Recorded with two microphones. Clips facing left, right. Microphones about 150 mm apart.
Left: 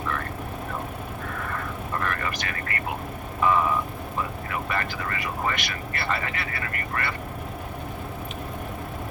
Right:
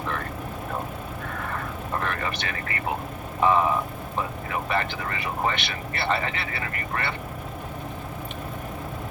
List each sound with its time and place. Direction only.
2.0 s vehicle: 25° right (ahead or behind)
3.4 s speech: 25° right (ahead or behind)